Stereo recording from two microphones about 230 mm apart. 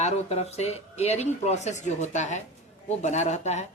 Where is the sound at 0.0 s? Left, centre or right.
Left.